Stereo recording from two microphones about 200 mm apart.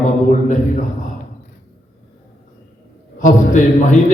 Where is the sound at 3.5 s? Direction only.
40° left (ahead or behind).